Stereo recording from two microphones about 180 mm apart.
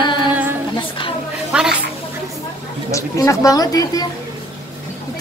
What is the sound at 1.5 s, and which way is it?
Speech, 5° right (ahead or behind).